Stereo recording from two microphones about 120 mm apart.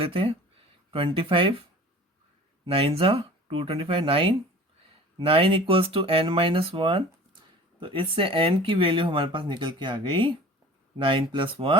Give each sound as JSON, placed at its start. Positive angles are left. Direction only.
{"t": 0.0, "sound": "speech", "side_deg": -45}
{"t": 2.6, "sound": "speech", "side_deg": -50}